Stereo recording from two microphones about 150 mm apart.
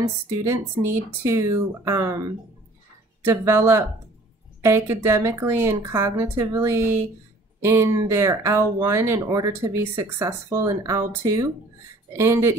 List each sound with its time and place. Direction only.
0.4 s speech: 20° right (ahead or behind)
3.3 s speech: 15° right (ahead or behind)